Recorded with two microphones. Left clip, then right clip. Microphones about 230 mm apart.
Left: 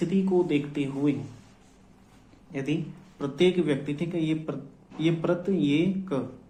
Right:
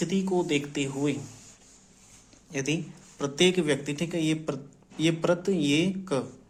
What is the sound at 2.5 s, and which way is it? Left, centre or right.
A man's voice, right.